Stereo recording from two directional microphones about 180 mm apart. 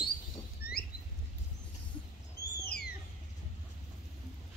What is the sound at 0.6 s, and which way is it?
Rodents, 10° right (ahead or behind).